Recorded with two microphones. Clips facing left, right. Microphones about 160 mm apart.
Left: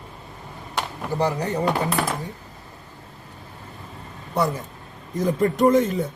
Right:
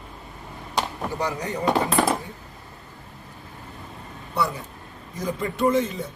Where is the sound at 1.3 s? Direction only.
35° left (ahead or behind).